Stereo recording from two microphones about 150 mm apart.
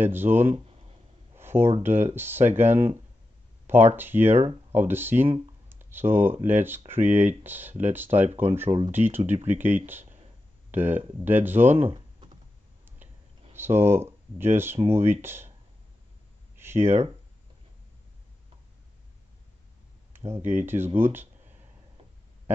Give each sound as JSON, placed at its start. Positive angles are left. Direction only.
{"t": 0.0, "sound": "speech", "side_deg": -15}
{"t": 1.3, "sound": "a sound", "side_deg": -15}
{"t": 1.8, "sound": "speech", "side_deg": -15}
{"t": 11.8, "sound": "typing", "side_deg": -35}
{"t": 13.6, "sound": "speech", "side_deg": -15}
{"t": 16.5, "sound": "a sound", "side_deg": -15}
{"t": 20.4, "sound": "speech", "side_deg": -15}